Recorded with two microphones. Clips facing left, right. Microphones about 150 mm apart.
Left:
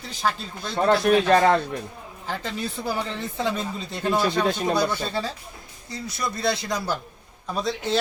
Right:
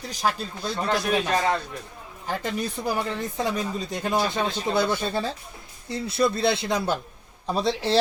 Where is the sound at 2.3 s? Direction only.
15° right (ahead or behind).